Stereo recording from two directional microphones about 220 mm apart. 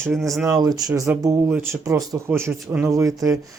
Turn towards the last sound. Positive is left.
turn(degrees=-15)  # may be behind; listen again after turning